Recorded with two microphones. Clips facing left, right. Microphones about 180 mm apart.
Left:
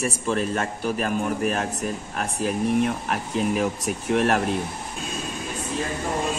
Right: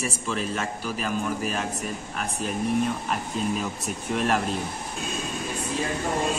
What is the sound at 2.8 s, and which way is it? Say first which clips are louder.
Speech: left 2 dB; 65° left (ahead or behind).